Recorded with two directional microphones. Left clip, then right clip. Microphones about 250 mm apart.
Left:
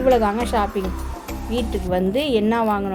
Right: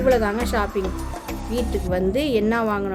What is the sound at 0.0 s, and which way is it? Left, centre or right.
Speech, centre.